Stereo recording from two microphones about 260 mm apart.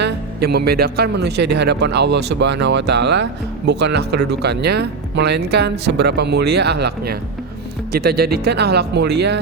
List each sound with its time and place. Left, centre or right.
0.0 s speech: right